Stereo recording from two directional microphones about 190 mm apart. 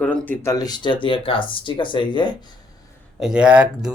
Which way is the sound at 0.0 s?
10° left (ahead or behind).